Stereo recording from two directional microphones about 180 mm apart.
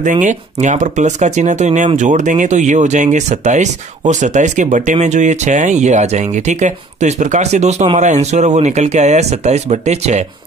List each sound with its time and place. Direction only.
0.0 s speech: 45° right (ahead or behind)